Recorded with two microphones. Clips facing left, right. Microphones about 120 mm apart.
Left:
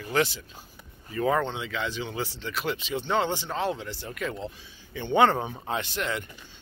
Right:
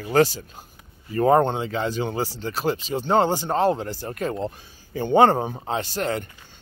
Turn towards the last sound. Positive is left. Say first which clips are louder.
# right 5 dB
turn(degrees=-40)  # may be behind; listen again after turning